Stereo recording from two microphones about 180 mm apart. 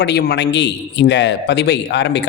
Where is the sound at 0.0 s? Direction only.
65° left (ahead or behind).